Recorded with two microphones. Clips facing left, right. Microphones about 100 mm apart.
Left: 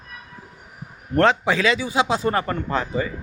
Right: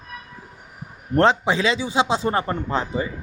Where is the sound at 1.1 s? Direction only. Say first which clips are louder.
Even; 25° right (ahead or behind).